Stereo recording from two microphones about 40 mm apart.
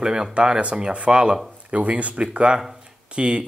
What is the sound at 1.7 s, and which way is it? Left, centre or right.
Speech, right.